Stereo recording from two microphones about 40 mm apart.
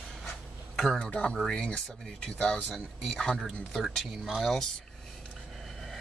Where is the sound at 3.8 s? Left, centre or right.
Centre.